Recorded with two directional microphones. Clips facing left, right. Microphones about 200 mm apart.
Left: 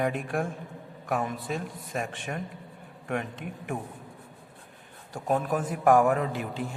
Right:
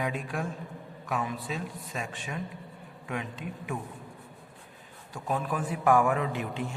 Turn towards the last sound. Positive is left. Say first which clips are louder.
# left 2 dB
turn(degrees=40)  # may be behind; listen again after turning